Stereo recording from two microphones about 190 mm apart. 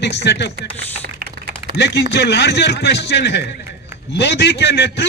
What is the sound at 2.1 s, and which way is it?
A man's voice, 60° left (ahead or behind).